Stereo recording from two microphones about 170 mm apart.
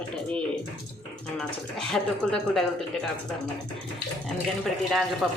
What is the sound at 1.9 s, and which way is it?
Speech, 5° left (ahead or behind).